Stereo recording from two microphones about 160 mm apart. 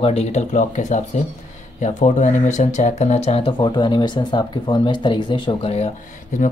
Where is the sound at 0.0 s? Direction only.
45° left (ahead or behind).